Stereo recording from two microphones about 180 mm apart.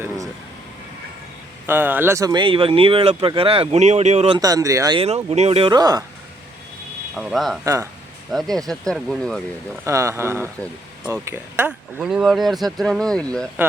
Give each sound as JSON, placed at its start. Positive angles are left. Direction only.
{"t": 1.6, "sound": "speech", "side_deg": -10}
{"t": 4.4, "sound": "speech", "side_deg": -20}
{"t": 4.9, "sound": "speech", "side_deg": -35}
{"t": 7.2, "sound": "speech", "side_deg": 0}
{"t": 7.6, "sound": "speech", "side_deg": -15}
{"t": 8.3, "sound": "speech", "side_deg": 0}
{"t": 9.8, "sound": "speech", "side_deg": -15}